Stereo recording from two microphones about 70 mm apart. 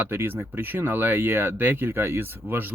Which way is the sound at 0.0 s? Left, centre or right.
Right.